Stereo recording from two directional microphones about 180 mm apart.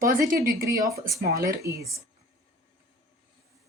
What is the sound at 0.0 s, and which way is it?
A woman's voice, 50° right (ahead or behind).